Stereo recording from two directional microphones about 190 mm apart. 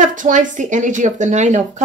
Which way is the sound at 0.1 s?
45° right (ahead or behind).